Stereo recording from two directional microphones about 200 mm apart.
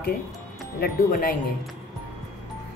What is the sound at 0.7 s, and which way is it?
Speech, 50° left (ahead or behind).